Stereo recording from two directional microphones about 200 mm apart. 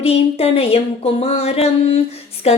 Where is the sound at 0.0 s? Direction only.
30° left (ahead or behind).